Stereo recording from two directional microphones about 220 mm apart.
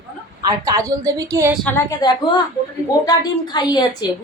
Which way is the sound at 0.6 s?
15° right (ahead or behind).